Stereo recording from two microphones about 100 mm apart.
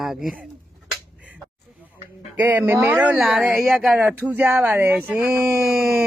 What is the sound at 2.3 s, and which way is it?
Speech, 20° right (ahead or behind).